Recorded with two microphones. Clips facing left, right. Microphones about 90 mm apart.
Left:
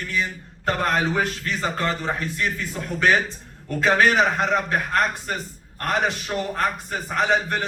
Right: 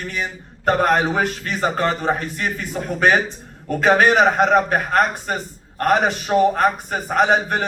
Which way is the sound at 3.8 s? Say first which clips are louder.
Right 4 dB; 55° right (ahead or behind).